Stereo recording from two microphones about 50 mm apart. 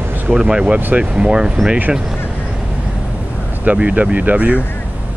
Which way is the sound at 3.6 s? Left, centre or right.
Right.